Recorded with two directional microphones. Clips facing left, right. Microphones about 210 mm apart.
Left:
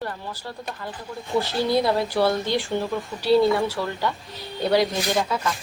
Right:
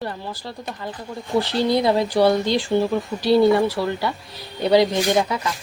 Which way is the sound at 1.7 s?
15° right (ahead or behind).